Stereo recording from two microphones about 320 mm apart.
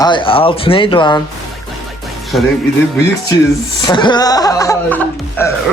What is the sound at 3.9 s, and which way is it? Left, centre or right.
Speech, centre.